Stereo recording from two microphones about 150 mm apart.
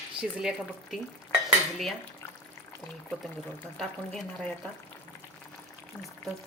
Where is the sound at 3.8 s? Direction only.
5° left (ahead or behind).